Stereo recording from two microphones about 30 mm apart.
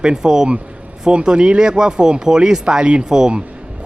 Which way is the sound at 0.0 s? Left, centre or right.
Right.